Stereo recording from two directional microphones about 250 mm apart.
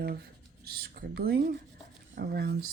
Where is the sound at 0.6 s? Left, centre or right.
Right.